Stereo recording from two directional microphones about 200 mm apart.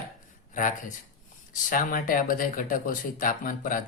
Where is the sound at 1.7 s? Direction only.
45° left (ahead or behind).